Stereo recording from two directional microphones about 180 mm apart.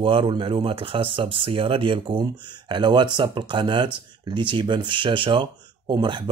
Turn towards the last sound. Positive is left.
turn(degrees=-25)  # may be behind; listen again after turning